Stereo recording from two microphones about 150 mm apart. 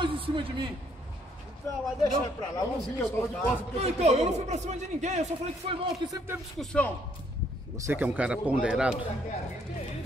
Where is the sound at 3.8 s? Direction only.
45° right (ahead or behind).